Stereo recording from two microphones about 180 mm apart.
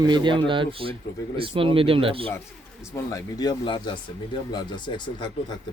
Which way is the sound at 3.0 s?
20° left (ahead or behind).